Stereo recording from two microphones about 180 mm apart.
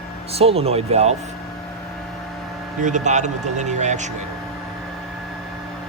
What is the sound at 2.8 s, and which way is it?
Speech, 45° right (ahead or behind).